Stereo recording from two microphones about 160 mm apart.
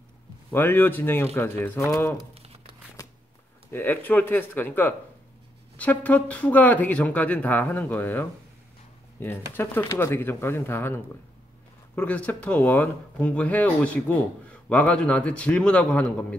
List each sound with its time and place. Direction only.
0.5 s speech: 15° left (ahead or behind)
2.3 s crumpling: 40° right (ahead or behind)
3.7 s speech: 10° left (ahead or behind)
9.5 s speech: 15° left (ahead or behind)